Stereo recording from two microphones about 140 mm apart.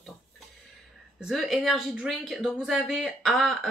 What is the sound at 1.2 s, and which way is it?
A woman's voice, centre (ahead or behind).